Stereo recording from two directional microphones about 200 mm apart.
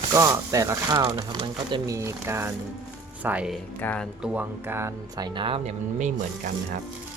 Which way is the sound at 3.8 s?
10° left (ahead or behind).